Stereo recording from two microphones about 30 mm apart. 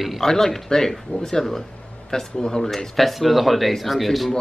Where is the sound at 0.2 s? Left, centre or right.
Centre.